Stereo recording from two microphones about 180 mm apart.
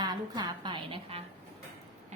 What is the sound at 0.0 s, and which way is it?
Music, 25° right (ahead or behind).